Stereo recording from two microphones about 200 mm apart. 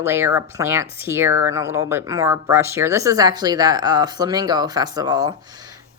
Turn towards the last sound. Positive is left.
turn(degrees=-20)  # may be behind; listen again after turning